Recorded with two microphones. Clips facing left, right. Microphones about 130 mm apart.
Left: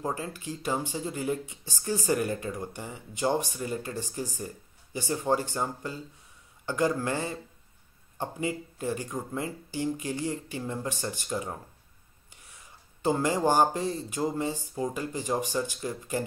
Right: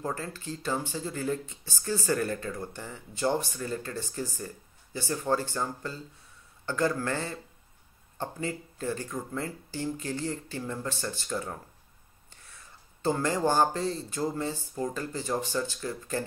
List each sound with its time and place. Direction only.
0.0 s speech: 15° left (ahead or behind)
13.0 s speech: 15° left (ahead or behind)